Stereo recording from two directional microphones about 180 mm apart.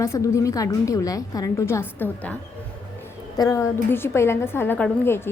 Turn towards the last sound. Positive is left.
turn(degrees=15)  # may be behind; listen again after turning